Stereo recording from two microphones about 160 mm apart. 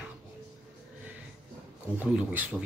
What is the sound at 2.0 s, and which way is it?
Speech, 10° right (ahead or behind).